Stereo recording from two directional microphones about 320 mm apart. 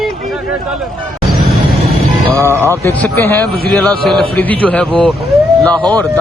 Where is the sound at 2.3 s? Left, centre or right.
Centre.